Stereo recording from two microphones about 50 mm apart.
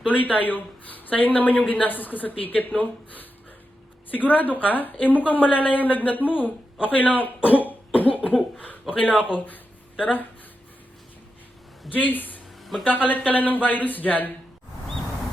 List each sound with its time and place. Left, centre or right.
0.1 s speech: left
11.9 s speech: left